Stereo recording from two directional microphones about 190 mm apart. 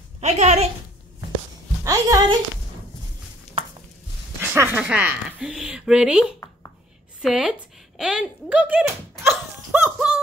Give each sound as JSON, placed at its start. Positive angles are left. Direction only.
{"t": 0.2, "sound": "speech", "side_deg": -35}
{"t": 1.9, "sound": "speech", "side_deg": -20}
{"t": 4.4, "sound": "speech", "side_deg": -10}
{"t": 9.3, "sound": "dog", "side_deg": -5}